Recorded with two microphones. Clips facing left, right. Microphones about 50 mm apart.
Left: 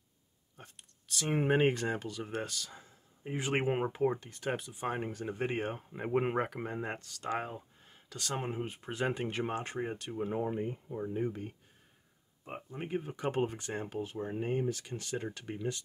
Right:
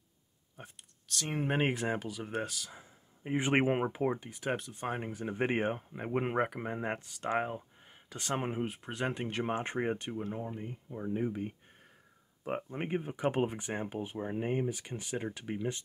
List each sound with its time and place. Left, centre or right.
0.6 s speech: centre
1.0 s speech: centre
1.5 s speech: centre
3.3 s speech: right
5.4 s speech: right
5.9 s speech: centre
8.7 s speech: centre
9.5 s speech: right
10.2 s speech: centre
11.0 s speech: centre
12.7 s speech: right
13.0 s speech: centre